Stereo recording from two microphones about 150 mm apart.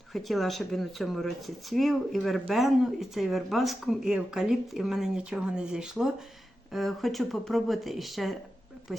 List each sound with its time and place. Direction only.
0.1 s speech: centre (ahead or behind)